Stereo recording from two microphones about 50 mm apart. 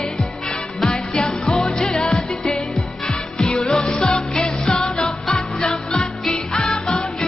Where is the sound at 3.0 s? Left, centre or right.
Centre.